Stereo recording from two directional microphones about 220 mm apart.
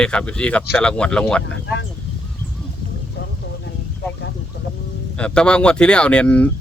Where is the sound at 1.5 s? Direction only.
55° left (ahead or behind).